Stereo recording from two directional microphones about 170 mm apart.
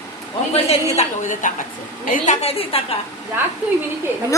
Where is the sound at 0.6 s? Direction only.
45° left (ahead or behind).